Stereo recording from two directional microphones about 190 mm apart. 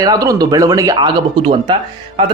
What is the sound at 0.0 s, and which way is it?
A man's voice, 20° right (ahead or behind).